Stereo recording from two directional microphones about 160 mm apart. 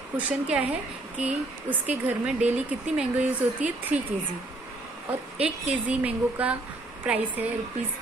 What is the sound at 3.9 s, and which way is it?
Speech, 45° right (ahead or behind).